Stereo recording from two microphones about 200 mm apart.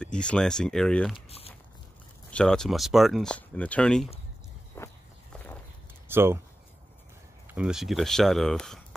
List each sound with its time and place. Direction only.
0.0 s speech: 5° left (ahead or behind)
1.1 s speech: 30° left (ahead or behind)
2.3 s speech: 5° left (ahead or behind)
4.7 s walk: 10° left (ahead or behind)
6.0 s speech: 10° right (ahead or behind)
7.5 s speech: 5° right (ahead or behind)